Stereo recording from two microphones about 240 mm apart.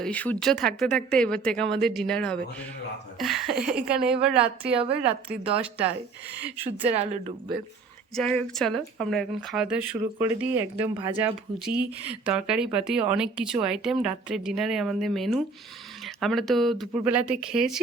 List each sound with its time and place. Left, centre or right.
0.0 s speech: centre
3.2 s a sound: centre
3.6 s speech: centre
6.7 s speech: right
8.1 s speech: centre